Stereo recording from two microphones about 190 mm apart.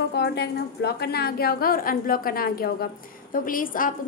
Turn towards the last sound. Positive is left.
turn(degrees=45)  # may be behind; listen again after turning